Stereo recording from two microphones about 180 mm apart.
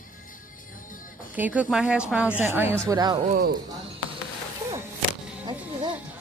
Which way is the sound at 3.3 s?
60° right (ahead or behind).